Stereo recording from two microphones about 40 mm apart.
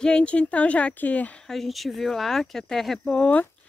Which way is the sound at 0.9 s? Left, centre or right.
Left.